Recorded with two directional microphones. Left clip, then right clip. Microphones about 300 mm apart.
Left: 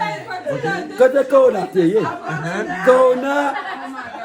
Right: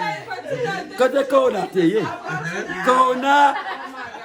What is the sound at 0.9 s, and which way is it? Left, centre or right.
A man's voice, centre.